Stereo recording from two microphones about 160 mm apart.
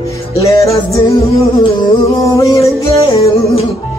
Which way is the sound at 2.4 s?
20° left (ahead or behind).